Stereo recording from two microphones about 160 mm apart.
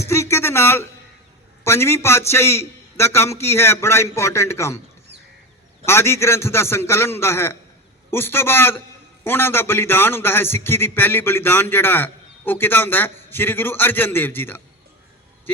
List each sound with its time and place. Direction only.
0.0 s a sound: 15° left (ahead or behind)
1.6 s a man's voice: 15° left (ahead or behind)
5.8 s a man's voice: 15° left (ahead or behind)